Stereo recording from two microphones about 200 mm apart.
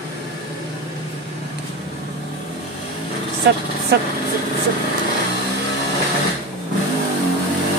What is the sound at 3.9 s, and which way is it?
Speech, 55° right (ahead or behind).